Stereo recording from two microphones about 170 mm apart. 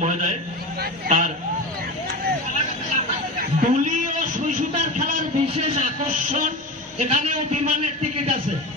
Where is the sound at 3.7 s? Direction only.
45° right (ahead or behind).